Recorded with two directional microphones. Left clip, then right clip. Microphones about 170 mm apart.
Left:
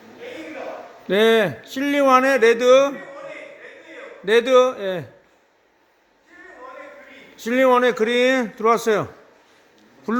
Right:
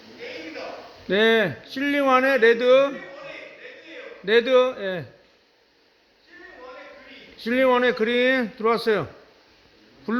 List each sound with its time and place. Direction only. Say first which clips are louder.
1.0 s speech: left 3 dB; 25° left (ahead or behind)
4.3 s speech: left 3 dB; 30° left (ahead or behind)
7.4 s speech: left 3 dB; 25° left (ahead or behind)